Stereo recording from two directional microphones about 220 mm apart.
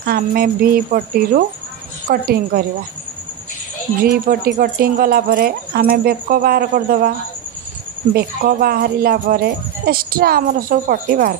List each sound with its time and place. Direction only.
0.0 s speech: 45° right (ahead or behind)
4.0 s speech: 40° right (ahead or behind)
8.1 s speech: 40° right (ahead or behind)